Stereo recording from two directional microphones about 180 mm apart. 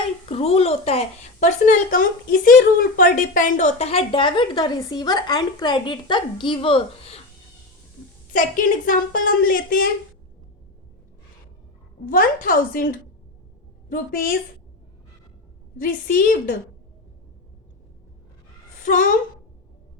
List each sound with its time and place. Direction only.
0.3 s a woman's voice: 35° left (ahead or behind)
8.3 s speech: 50° left (ahead or behind)
12.0 s speech: 50° left (ahead or behind)
13.9 s speech: 55° left (ahead or behind)
15.8 s speech: 50° left (ahead or behind)